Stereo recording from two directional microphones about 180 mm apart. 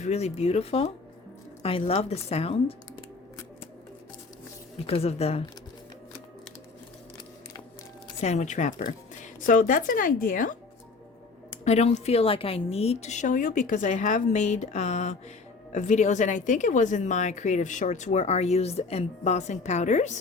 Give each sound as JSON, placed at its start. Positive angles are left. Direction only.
{"t": 0.0, "sound": "speech", "side_deg": 40}
{"t": 4.9, "sound": "speech", "side_deg": 35}
{"t": 8.2, "sound": "speech", "side_deg": 40}